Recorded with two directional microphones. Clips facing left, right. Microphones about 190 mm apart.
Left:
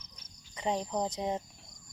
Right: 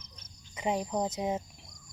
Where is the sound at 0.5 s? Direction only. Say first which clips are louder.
Right 1 dB; 10° right (ahead or behind).